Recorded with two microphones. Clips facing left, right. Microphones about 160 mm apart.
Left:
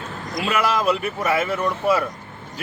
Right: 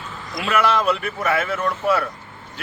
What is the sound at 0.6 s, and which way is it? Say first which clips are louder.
Speech: right 2 dB; 10° left (ahead or behind).